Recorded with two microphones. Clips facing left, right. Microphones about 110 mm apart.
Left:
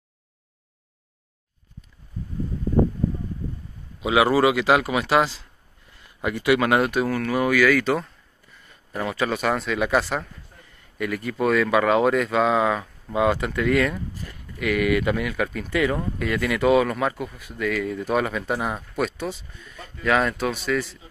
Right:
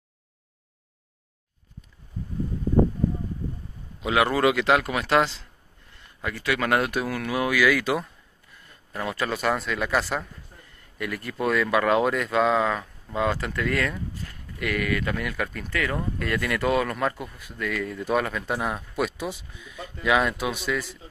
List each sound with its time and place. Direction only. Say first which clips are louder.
4.0 s speech: left 3 dB; 5° left (ahead or behind)
6.2 s speech: left 6 dB; 15° left (ahead or behind)
6.7 s speech: left 4 dB; centre (ahead or behind)
14.9 s speech: left 6 dB; 15° left (ahead or behind)
15.2 s speech: left 4 dB; 5° left (ahead or behind)